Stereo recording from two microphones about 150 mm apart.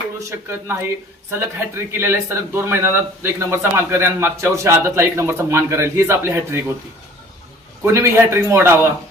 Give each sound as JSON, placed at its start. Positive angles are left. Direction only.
{"t": 0.3, "sound": "a man's voice", "side_deg": -15}
{"t": 7.8, "sound": "a man's voice", "side_deg": -15}